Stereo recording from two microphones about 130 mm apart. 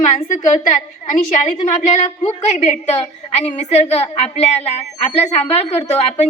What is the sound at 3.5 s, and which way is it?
A woman's voice, 55° left (ahead or behind).